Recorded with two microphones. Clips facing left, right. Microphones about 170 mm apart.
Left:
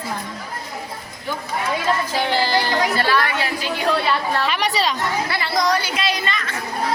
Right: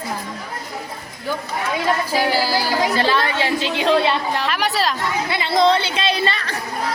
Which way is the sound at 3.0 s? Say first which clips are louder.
Right 1 dB; 25° right (ahead or behind).